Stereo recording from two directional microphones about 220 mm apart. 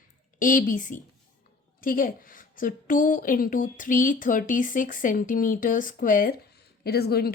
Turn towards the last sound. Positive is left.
turn(degrees=45)  # may be behind; listen again after turning